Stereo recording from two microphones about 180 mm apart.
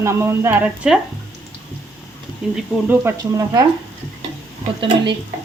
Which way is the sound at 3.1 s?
20° right (ahead or behind).